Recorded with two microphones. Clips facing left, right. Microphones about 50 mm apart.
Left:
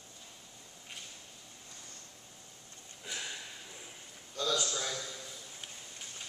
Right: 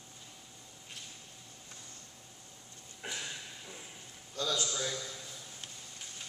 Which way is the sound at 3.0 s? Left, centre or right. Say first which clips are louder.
Right 2 dB; right.